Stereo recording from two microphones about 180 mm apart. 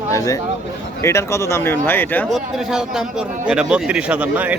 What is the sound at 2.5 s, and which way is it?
A man's voice, 5° right (ahead or behind).